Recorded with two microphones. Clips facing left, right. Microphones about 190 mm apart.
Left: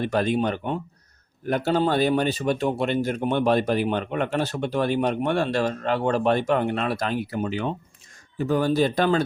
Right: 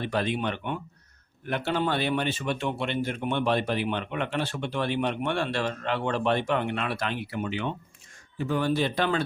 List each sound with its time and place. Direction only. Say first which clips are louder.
0.0 s speech: left 5 dB; 45° left (ahead or behind)